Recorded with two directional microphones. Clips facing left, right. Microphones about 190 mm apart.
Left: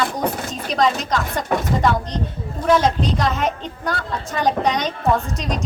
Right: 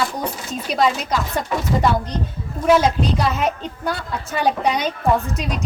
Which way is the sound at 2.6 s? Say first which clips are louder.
Right 1 dB; 5° right (ahead or behind).